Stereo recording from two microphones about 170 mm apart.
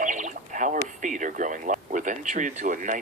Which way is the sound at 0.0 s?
45° right (ahead or behind).